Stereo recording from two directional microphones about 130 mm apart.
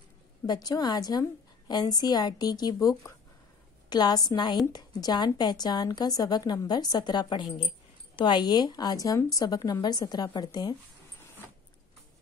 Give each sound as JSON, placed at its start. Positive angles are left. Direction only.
{"t": 0.5, "sound": "a woman's voice", "side_deg": 30}